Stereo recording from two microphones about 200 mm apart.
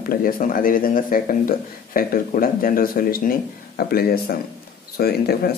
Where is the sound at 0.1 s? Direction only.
45° left (ahead or behind).